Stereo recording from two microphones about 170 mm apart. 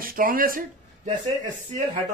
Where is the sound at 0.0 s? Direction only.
55° right (ahead or behind).